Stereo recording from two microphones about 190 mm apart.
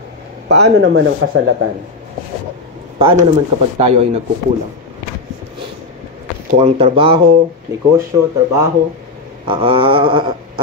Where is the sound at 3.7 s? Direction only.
30° right (ahead or behind).